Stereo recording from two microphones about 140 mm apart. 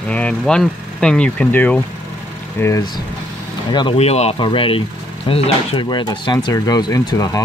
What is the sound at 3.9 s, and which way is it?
Speech, 50° left (ahead or behind).